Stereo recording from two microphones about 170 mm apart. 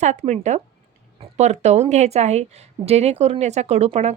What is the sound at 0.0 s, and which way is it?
Speech, 45° right (ahead or behind).